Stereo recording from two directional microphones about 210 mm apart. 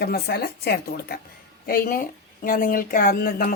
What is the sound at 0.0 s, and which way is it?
Speech, 50° left (ahead or behind).